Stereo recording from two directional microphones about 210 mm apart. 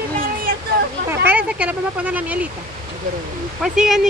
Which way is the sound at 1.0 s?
10° right (ahead or behind).